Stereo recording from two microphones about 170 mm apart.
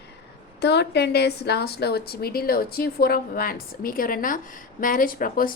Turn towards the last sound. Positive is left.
turn(degrees=55)  # may be behind; listen again after turning